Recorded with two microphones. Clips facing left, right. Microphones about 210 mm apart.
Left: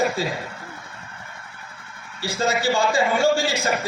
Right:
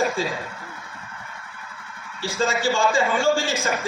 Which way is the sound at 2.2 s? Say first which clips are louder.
Even; 40° left (ahead or behind).